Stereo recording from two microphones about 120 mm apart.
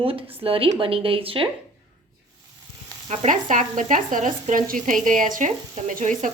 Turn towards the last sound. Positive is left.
turn(degrees=-90)